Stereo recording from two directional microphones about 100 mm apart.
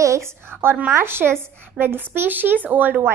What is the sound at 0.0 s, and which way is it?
A child's voice, 30° right (ahead or behind).